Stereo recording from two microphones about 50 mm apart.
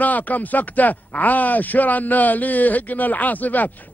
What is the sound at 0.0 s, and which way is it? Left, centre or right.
Speech, left.